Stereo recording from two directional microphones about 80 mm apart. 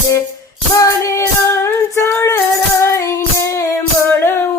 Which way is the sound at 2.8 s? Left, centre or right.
Left.